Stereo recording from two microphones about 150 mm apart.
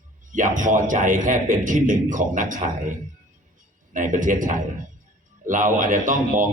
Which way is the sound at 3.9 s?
60° right (ahead or behind).